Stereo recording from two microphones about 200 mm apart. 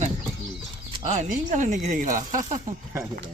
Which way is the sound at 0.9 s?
35° right (ahead or behind).